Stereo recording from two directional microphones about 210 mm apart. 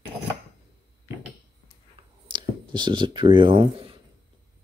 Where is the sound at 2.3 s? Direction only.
20° right (ahead or behind).